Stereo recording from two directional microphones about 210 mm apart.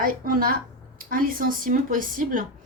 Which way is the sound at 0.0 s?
40° right (ahead or behind).